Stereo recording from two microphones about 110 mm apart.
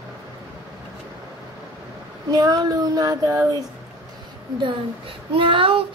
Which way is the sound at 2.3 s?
40° right (ahead or behind).